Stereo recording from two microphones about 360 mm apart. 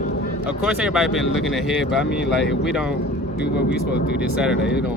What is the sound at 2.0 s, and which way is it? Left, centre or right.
Speech, left.